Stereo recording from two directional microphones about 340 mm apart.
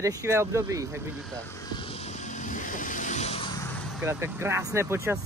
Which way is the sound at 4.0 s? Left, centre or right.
Centre.